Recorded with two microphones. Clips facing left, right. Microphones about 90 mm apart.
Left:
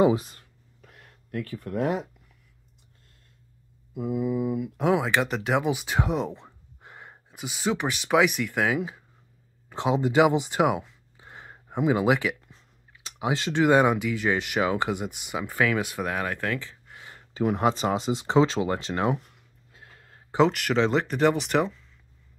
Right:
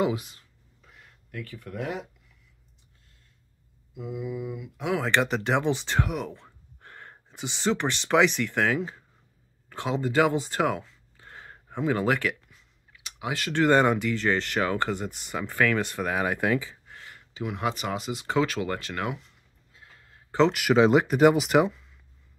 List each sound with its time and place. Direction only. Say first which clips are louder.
0.0 s speech: left 6 dB; 35° left (ahead or behind)
0.4 s a sound: left 4 dB; 55° left (ahead or behind)
3.9 s mantra: left 7 dB; 45° left (ahead or behind)
5.0 s speech: right 1 dB; 5° left (ahead or behind)
6.0 s speech: left 4 dB; 25° left (ahead or behind)
12.4 s a sound: left 3 dB; 35° left (ahead or behind)
13.6 s speech: even; 5° left (ahead or behind)
17.1 s a sound: left 8 dB; 40° left (ahead or behind)
17.6 s speech: left 2 dB; 30° left (ahead or behind)
20.4 s speech: right 6 dB; 5° right (ahead or behind)